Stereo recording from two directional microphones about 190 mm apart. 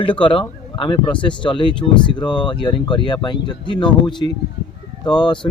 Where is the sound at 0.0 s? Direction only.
25° left (ahead or behind).